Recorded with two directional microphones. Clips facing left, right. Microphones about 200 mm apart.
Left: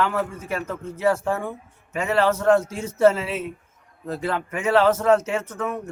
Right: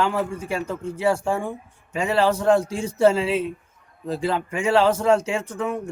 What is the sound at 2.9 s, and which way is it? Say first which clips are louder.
Speech: left 1 dB; 15° right (ahead or behind).